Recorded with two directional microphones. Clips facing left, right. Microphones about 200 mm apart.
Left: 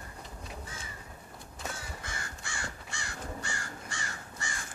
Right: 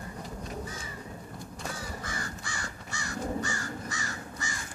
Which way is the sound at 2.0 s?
25° left (ahead or behind).